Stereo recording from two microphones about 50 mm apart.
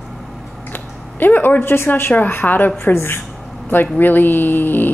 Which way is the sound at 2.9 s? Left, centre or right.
Left.